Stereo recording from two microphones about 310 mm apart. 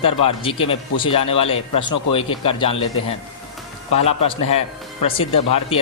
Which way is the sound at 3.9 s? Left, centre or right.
Left.